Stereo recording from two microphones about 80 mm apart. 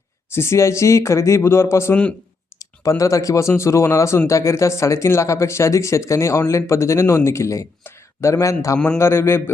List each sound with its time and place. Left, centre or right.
0.3 s speech: left